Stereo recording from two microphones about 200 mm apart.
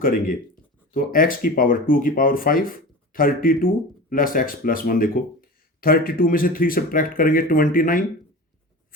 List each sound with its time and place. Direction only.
0.0 s speech: 45° left (ahead or behind)